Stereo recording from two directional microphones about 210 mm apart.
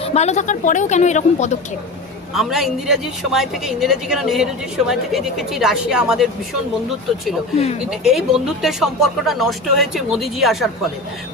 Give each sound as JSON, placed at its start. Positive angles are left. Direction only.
{"t": 0.0, "sound": "a woman's voice", "side_deg": 30}
{"t": 2.3, "sound": "speech", "side_deg": 0}
{"t": 7.9, "sound": "speech", "side_deg": 0}